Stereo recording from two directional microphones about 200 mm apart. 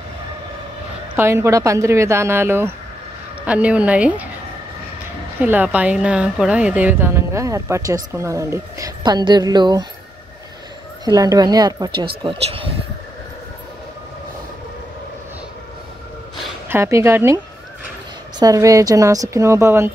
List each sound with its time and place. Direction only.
1.1 s a woman's voice: 10° right (ahead or behind)
5.4 s a woman's voice: 5° right (ahead or behind)
11.1 s speech: 20° right (ahead or behind)
16.6 s a woman's voice: 15° right (ahead or behind)
18.4 s a woman's voice: 15° right (ahead or behind)